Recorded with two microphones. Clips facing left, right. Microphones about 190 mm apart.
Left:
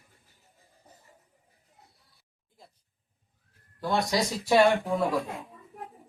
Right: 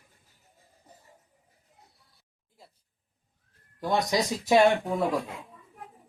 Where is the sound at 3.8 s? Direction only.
20° right (ahead or behind).